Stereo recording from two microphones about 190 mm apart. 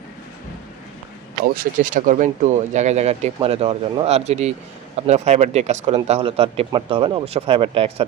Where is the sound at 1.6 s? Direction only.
45° right (ahead or behind).